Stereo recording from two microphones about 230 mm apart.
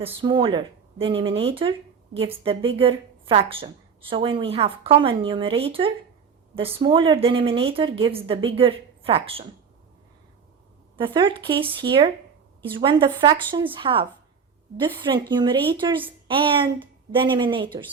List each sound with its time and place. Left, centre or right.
0.0 s a woman's voice: right
10.9 s a woman's voice: right